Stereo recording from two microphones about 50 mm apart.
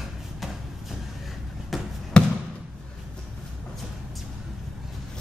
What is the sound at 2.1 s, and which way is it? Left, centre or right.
Basketball bounce, centre.